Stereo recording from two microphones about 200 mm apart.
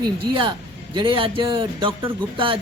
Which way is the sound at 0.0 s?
25° right (ahead or behind).